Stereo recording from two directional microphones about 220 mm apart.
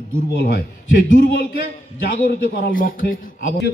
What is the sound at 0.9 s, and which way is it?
A man's voice, 40° left (ahead or behind).